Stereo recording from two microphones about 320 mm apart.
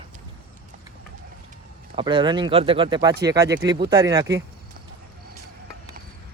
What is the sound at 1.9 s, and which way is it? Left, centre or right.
Speech, centre.